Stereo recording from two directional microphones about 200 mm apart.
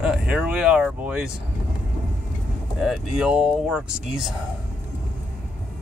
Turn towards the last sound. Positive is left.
turn(degrees=-5)  # may be behind; listen again after turning